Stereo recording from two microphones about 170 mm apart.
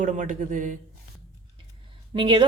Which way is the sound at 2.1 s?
30° right (ahead or behind).